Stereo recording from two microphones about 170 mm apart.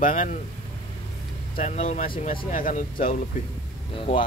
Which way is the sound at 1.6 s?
45° left (ahead or behind).